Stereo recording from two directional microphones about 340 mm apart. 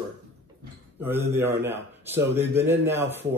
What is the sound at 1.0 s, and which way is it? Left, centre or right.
Speech, centre.